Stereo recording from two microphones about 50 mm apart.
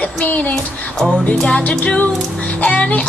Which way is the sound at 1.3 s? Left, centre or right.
Centre.